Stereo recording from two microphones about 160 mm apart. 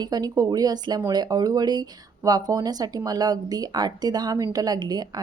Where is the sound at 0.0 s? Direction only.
25° right (ahead or behind).